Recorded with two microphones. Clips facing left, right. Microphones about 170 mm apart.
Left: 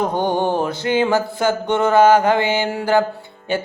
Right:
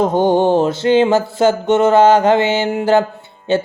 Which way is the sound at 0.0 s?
20° right (ahead or behind).